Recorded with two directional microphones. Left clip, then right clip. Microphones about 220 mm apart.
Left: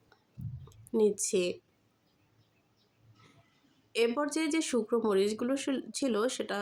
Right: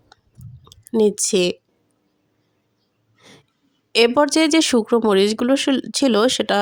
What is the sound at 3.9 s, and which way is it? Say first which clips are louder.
Speech: right 15 dB; 40° right (ahead or behind).